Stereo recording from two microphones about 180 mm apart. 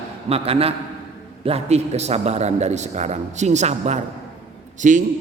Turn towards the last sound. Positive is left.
turn(degrees=-45)  # may be behind; listen again after turning